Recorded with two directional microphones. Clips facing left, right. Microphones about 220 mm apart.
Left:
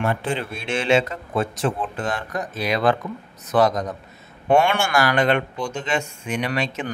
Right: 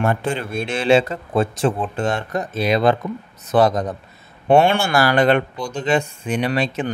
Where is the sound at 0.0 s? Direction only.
45° right (ahead or behind).